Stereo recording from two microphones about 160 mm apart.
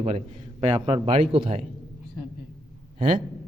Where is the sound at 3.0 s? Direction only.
35° right (ahead or behind).